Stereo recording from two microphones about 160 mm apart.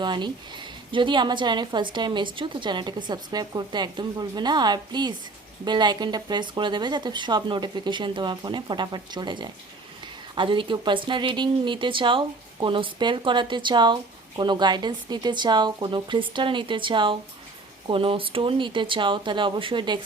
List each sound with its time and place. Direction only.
0.0 s speech: 30° right (ahead or behind)